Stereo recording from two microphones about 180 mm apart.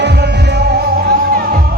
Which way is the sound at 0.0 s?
70° right (ahead or behind).